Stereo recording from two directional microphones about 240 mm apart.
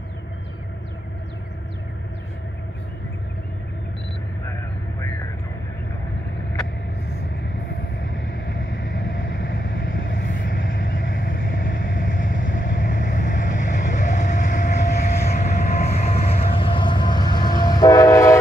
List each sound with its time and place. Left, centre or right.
8.6 s vehicle: left
15.2 s vehicle: left
16.5 s train: left